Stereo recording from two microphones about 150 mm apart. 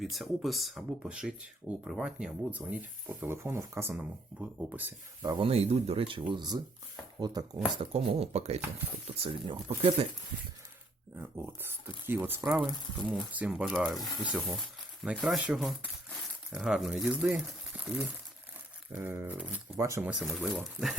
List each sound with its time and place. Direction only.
0.0 s speech: centre (ahead or behind)
5.2 s speech: 25° right (ahead or behind)
5.5 s speech: 45° right (ahead or behind)
7.8 s speech: 40° right (ahead or behind)
11.2 s speech: 15° right (ahead or behind)
18.9 s speech: 15° right (ahead or behind)
19.8 s speech: 20° right (ahead or behind)
20.1 s speech: 5° right (ahead or behind)